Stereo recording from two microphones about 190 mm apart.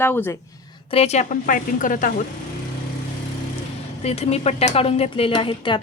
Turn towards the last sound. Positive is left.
turn(degrees=25)  # may be behind; listen again after turning